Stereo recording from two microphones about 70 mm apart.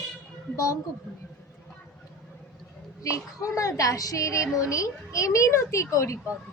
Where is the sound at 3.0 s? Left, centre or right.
Left.